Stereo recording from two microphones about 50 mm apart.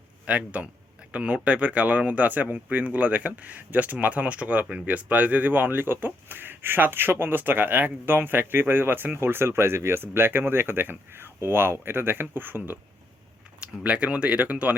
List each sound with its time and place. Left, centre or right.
0.3 s speech: right
13.6 s speech: right